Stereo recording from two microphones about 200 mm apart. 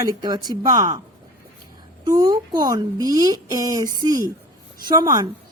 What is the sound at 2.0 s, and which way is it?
A woman's voice, 20° right (ahead or behind).